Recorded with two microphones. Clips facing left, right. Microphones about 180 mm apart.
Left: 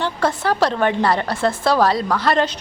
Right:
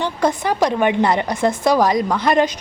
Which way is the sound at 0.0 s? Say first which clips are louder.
Right 1 dB; 15° right (ahead or behind).